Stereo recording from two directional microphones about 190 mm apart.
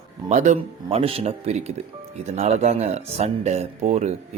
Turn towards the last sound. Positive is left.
turn(degrees=-35)  # may be behind; listen again after turning